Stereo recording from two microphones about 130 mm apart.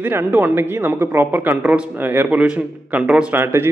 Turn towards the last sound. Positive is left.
turn(degrees=-15)  # may be behind; listen again after turning